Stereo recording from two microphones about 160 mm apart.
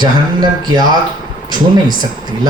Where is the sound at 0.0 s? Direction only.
25° right (ahead or behind).